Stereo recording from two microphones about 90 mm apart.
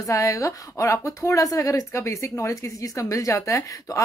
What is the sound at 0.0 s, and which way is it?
Speech, 35° left (ahead or behind).